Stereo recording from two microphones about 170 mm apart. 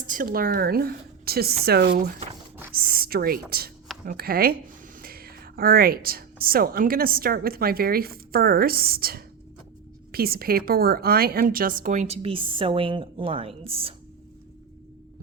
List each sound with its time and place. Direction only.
0.1 s a woman's voice: 55° right (ahead or behind); by 13.9 s 35° right (ahead or behind)